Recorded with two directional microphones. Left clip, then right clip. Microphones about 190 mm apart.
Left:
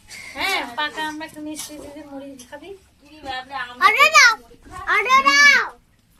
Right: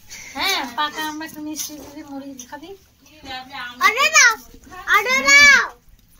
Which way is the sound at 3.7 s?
35° left (ahead or behind).